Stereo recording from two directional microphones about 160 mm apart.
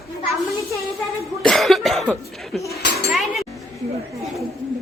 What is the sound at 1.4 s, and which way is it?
A woman's voice, centre (ahead or behind).